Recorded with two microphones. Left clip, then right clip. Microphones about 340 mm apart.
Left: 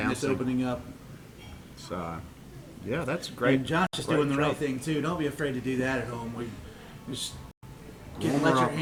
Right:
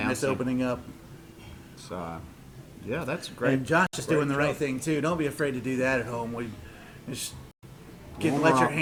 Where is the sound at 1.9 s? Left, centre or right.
Centre.